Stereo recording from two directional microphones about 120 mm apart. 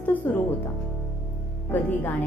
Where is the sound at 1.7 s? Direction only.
15° left (ahead or behind).